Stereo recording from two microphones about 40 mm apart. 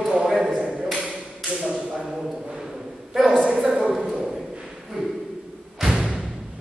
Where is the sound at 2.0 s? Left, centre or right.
Centre.